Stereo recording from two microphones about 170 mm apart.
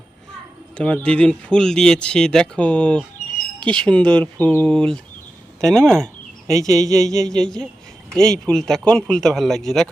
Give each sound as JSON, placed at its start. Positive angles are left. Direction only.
{"t": 0.8, "sound": "speech", "side_deg": 5}
{"t": 6.5, "sound": "speech", "side_deg": -20}
{"t": 7.2, "sound": "speech", "side_deg": 5}